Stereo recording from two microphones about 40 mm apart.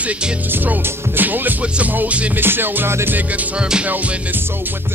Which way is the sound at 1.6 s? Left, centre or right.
Right.